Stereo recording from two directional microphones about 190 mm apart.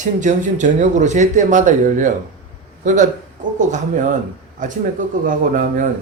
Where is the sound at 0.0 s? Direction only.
40° right (ahead or behind).